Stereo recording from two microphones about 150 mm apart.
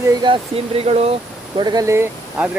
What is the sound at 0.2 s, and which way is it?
Speech, 35° right (ahead or behind).